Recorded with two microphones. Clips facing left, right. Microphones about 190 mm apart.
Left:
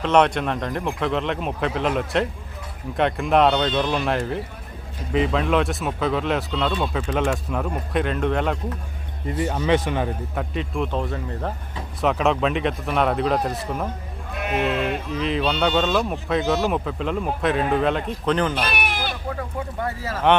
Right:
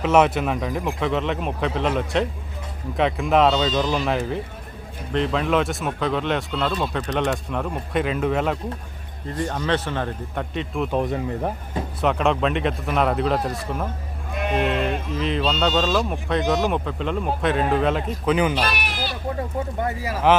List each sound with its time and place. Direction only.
0.0 s a man's voice: 5° right (ahead or behind)
9.2 s a man's voice: 10° left (ahead or behind)
10.9 s speech: 15° right (ahead or behind)
11.9 s a man's voice: centre (ahead or behind)
18.5 s bleat: 55° left (ahead or behind)
19.4 s a sound: 20° right (ahead or behind)